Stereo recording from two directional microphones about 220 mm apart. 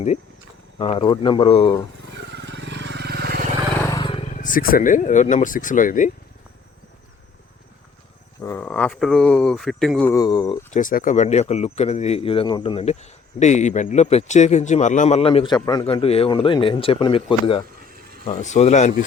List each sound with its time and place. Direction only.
0.8 s speech: 25° left (ahead or behind)
2.1 s vehicle: 55° right (ahead or behind)
3.8 s speech: 20° left (ahead or behind); by 6.1 s 35° left (ahead or behind)
8.4 s speech: 10° left (ahead or behind)
10.1 s speech: 15° left (ahead or behind)
10.7 s speech: 35° left (ahead or behind)
17.8 s a sound: 40° right (ahead or behind)
18.3 s speech: 30° left (ahead or behind)